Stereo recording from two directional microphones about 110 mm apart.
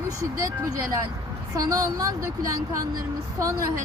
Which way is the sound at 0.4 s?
30° right (ahead or behind).